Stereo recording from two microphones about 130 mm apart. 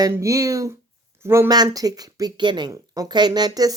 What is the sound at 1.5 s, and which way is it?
Speech, 30° right (ahead or behind).